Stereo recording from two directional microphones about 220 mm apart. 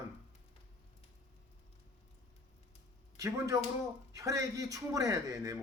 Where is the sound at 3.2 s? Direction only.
15° right (ahead or behind).